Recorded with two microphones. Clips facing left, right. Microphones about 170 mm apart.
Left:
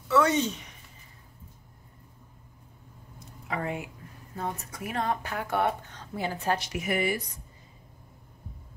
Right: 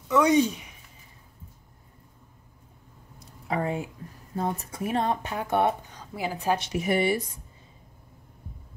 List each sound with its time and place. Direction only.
0.1 s speech: 15° right (ahead or behind)
3.4 s speech: 35° right (ahead or behind); by 6.3 s 10° right (ahead or behind)
6.6 s speech: 30° right (ahead or behind)